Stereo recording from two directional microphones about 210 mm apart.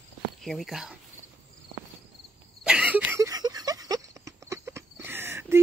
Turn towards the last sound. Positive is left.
turn(degrees=-10)  # may be behind; listen again after turning